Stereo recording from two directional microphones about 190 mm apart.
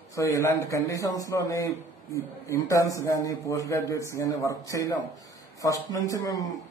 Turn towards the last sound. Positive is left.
turn(degrees=20)  # may be behind; listen again after turning